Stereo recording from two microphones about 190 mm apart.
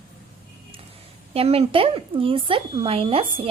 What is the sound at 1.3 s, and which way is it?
Speech, 30° right (ahead or behind).